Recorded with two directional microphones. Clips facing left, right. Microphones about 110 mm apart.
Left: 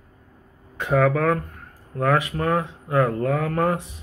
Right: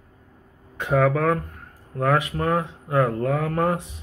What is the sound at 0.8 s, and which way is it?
Speech, 20° right (ahead or behind).